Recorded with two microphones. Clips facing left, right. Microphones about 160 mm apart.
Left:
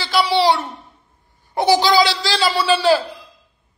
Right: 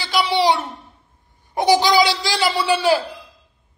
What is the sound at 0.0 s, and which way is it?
A woman's voice, 20° right (ahead or behind).